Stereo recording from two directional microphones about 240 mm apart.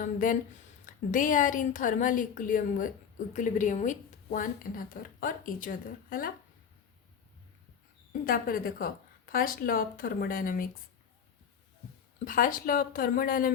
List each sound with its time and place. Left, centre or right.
0.0 s speech: left
8.1 s speech: left
12.2 s speech: left